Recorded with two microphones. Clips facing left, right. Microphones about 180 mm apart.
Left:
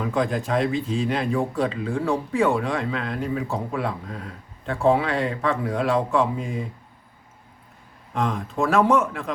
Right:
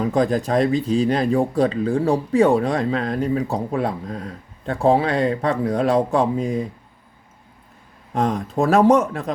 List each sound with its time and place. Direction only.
0.0 s speech: 40° right (ahead or behind)
8.1 s speech: 40° right (ahead or behind)